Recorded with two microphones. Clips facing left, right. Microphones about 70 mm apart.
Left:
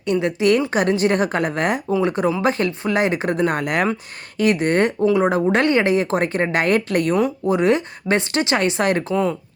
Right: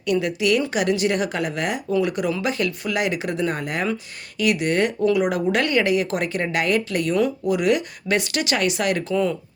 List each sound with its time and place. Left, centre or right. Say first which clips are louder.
0.1 s speech: left 3 dB; left
4.4 s speech: left 3 dB; left
7.2 s speech: left 2 dB; left